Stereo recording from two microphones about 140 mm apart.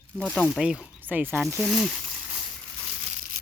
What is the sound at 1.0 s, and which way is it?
Speech, 15° right (ahead or behind).